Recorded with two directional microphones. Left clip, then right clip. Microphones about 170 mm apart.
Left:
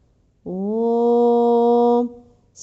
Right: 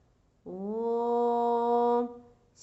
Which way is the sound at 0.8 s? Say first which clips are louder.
Left 11 dB; 45° left (ahead or behind).